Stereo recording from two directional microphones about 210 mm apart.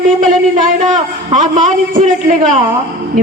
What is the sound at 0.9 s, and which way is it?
Speech, 35° right (ahead or behind).